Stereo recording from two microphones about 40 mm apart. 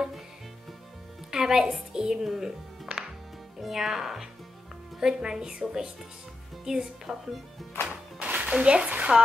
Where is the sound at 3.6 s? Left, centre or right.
Centre.